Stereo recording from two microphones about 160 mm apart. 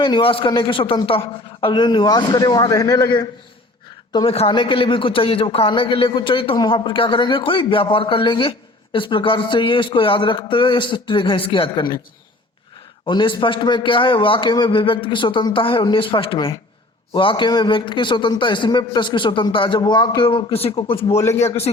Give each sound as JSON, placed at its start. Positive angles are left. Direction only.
{"t": 0.0, "sound": "a man's voice", "side_deg": 30}
{"t": 4.3, "sound": "a man's voice", "side_deg": 35}
{"t": 13.1, "sound": "a man's voice", "side_deg": 30}